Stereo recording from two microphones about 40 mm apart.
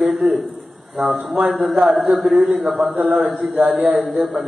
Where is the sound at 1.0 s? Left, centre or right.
Centre.